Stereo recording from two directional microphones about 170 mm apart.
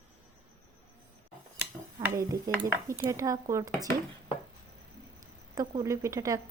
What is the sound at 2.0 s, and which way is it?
Speech, 20° right (ahead or behind).